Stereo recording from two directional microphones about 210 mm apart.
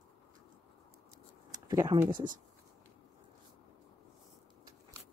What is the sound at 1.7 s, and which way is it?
Speech, 15° right (ahead or behind).